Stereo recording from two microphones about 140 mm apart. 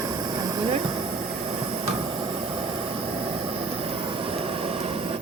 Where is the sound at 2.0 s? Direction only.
35° right (ahead or behind).